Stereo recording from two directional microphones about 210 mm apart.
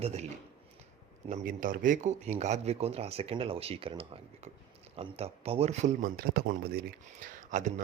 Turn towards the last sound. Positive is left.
turn(degrees=-35)  # may be behind; listen again after turning